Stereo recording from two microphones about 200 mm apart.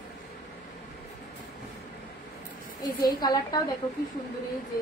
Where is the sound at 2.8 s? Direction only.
20° left (ahead or behind).